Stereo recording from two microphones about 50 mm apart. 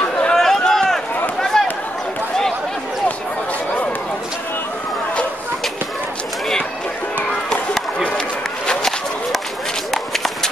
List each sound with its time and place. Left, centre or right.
0.3 s run: centre
1.5 s a sound: centre
9.8 s run: centre